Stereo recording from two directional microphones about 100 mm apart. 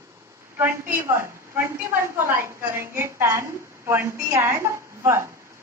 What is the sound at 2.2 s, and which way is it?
A woman's voice, 20° right (ahead or behind).